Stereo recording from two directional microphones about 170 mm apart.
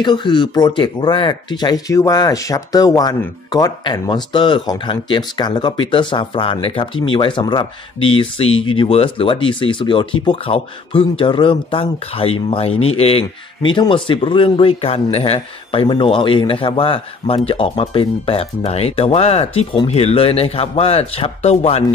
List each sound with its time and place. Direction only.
0.0 s speech: 25° left (ahead or behind)